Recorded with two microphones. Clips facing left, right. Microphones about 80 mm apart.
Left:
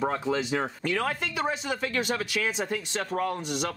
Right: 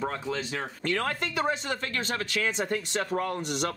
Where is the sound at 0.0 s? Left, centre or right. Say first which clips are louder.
Left 4 dB; centre.